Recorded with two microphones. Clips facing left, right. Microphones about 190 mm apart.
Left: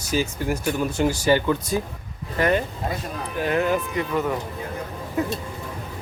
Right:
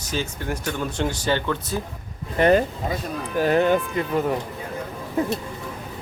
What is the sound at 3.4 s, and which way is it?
Speech, 35° right (ahead or behind).